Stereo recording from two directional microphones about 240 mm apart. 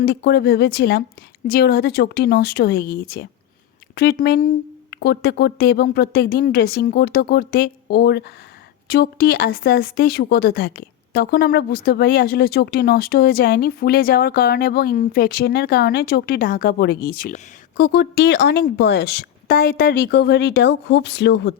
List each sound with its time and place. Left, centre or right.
0.0 s speech: left